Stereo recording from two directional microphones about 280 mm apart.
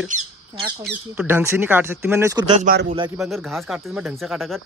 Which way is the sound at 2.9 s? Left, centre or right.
Centre.